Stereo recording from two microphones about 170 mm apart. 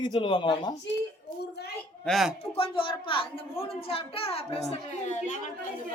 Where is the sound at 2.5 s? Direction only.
30° left (ahead or behind).